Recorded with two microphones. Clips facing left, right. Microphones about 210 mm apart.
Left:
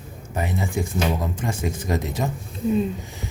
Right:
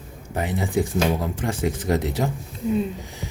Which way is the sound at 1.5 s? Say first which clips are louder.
Right 5 dB; 15° right (ahead or behind).